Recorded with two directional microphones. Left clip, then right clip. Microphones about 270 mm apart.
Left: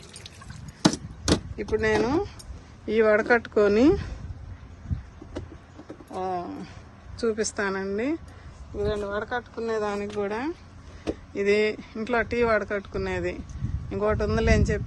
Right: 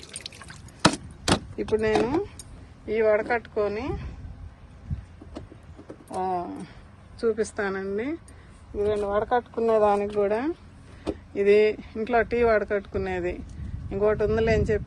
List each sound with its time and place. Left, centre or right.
1.6 s speech: centre
2.0 s speech: centre
6.1 s speech: centre